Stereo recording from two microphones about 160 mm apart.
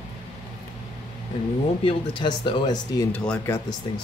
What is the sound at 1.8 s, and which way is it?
Speech, 30° left (ahead or behind).